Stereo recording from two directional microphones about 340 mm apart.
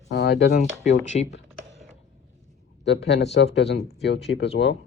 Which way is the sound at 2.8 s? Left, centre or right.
Left.